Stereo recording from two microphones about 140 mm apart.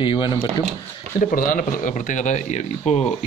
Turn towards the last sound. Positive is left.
turn(degrees=50)  # may be behind; listen again after turning